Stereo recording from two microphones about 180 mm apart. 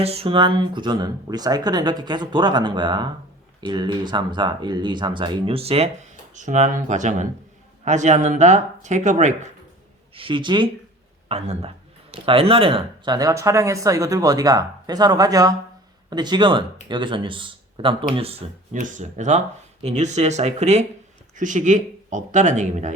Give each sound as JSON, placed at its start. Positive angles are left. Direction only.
{"t": 0.0, "sound": "speech", "side_deg": -35}
{"t": 10.2, "sound": "speech", "side_deg": -30}